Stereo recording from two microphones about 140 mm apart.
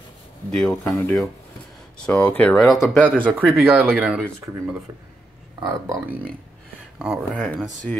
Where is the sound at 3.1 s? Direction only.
10° left (ahead or behind).